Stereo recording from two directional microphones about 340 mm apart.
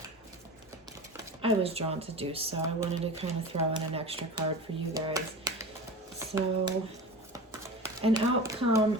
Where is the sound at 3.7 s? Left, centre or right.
Centre.